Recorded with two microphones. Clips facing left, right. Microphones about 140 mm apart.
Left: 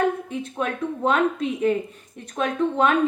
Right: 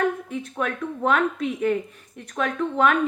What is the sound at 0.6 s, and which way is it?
Speech, 30° left (ahead or behind).